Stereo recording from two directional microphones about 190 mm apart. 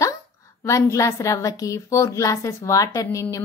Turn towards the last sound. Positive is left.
turn(degrees=15)  # may be behind; listen again after turning